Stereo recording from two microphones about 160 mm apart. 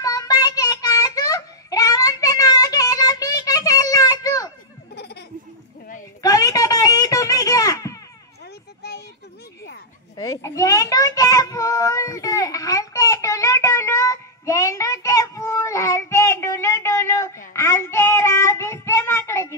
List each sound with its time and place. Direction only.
0.0 s child singing: 20° left (ahead or behind)
4.9 s laughter: 90° left
6.2 s a sound: 20° left (ahead or behind)
10.1 s child singing: 20° left (ahead or behind)